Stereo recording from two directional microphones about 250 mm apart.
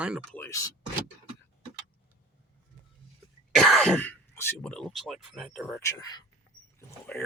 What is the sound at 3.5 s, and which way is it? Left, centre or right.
Speech, centre.